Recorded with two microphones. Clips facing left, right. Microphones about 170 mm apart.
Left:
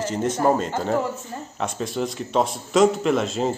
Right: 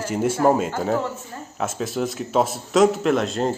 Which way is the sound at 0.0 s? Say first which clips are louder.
Right 2 dB; 10° right (ahead or behind).